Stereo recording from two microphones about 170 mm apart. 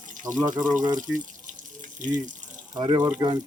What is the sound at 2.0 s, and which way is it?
Speech, 45° right (ahead or behind).